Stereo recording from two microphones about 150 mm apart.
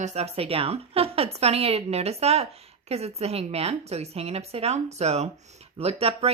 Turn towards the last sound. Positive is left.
turn(degrees=-45)  # may be behind; listen again after turning